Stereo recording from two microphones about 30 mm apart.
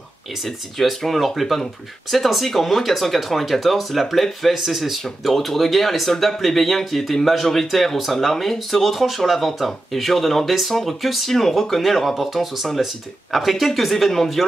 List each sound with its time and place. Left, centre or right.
1.0 s speech: centre
5.3 s speech: centre
12.8 s speech: centre